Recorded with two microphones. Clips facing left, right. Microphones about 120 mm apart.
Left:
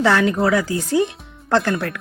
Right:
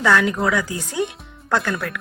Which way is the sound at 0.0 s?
30° left (ahead or behind).